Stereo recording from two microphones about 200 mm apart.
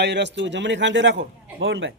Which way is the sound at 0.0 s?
60° right (ahead or behind).